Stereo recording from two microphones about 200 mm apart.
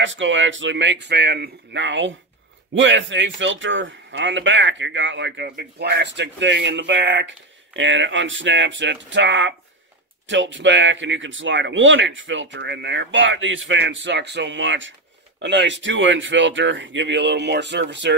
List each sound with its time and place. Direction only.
0.0 s speech: 65° right (ahead or behind)